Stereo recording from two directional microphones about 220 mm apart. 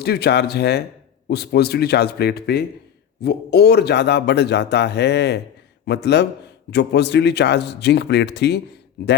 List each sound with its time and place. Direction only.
0.0 s a man's voice: 45° left (ahead or behind)